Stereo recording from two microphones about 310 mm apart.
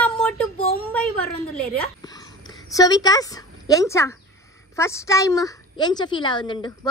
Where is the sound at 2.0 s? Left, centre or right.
Centre.